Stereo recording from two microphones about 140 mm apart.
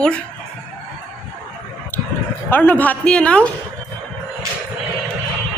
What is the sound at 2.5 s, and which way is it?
A woman's voice, 15° left (ahead or behind).